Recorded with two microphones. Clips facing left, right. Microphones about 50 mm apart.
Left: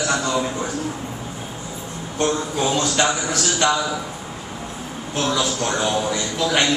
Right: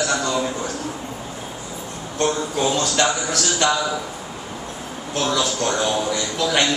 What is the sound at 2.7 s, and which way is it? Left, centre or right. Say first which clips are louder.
A man's voice: even; centre.